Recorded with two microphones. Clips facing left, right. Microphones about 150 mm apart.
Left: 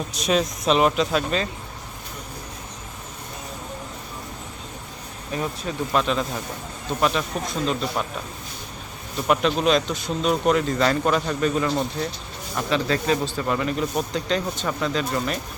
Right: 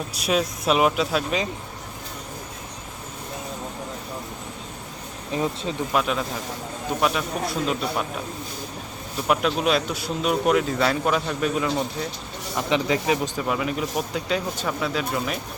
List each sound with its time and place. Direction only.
0.1 s speech: 5° right (ahead or behind)
5.3 s speech: 20° right (ahead or behind)
5.9 s speech: 5° right (ahead or behind)
9.2 s speech: 5° right (ahead or behind)
12.5 s speech: 15° right (ahead or behind)